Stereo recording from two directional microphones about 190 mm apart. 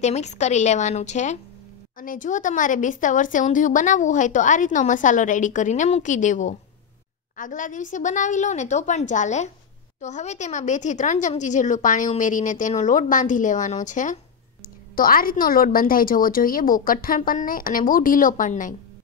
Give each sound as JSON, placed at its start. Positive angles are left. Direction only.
{"t": 0.0, "sound": "a woman's voice", "side_deg": 35}